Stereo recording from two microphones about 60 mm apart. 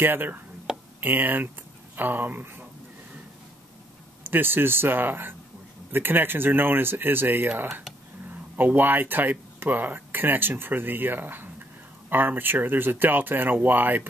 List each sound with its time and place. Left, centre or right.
0.0 s speech: right
0.7 s a sound: centre
1.0 s speech: right
4.2 s speech: right